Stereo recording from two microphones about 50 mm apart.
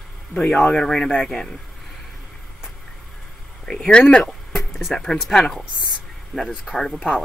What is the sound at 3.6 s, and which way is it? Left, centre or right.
Speech, centre.